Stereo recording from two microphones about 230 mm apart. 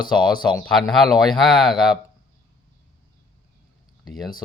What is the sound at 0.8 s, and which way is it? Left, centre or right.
Speech, centre.